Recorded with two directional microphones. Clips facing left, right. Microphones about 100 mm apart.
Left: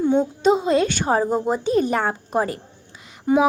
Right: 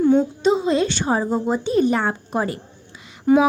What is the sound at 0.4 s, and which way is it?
Speech, 45° left (ahead or behind).